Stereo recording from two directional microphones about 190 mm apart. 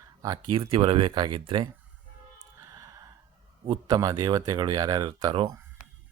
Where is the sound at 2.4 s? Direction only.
20° right (ahead or behind).